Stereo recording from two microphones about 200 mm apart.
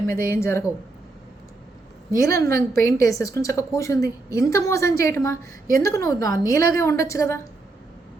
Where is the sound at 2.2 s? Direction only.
15° left (ahead or behind).